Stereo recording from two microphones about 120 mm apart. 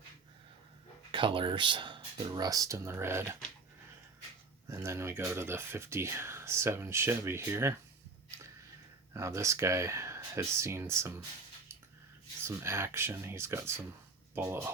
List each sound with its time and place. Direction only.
1.1 s speech: 45° right (ahead or behind); by 3.3 s 20° right (ahead or behind)
4.7 s speech: 20° right (ahead or behind)
9.1 s speech: 25° right (ahead or behind)
12.4 s speech: 20° right (ahead or behind)